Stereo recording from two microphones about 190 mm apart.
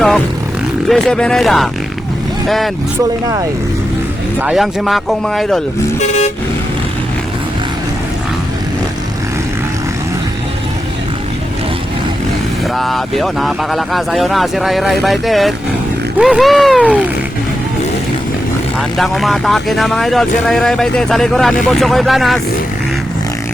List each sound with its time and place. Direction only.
0.9 s speech: centre (ahead or behind)
4.4 s speech: 5° right (ahead or behind)
6.0 s vehicle: 35° left (ahead or behind)
12.7 s speech: centre (ahead or behind)
18.8 s speech: centre (ahead or behind)